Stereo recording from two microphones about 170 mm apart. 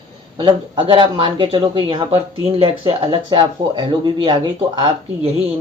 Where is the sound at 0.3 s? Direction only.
30° right (ahead or behind).